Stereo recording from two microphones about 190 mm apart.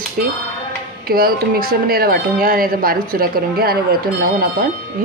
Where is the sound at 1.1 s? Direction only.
50° right (ahead or behind).